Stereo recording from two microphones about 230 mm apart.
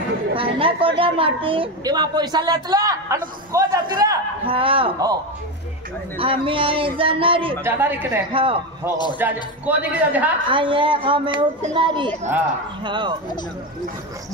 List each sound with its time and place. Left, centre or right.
0.3 s a woman's voice: right
6.1 s a woman's voice: right
7.6 s a man's voice: centre
8.3 s a woman's voice: right
9.2 s a man's voice: centre
10.5 s a woman's voice: right